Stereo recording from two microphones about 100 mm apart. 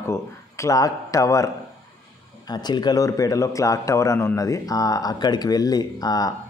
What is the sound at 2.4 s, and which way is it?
Speech, 45° left (ahead or behind).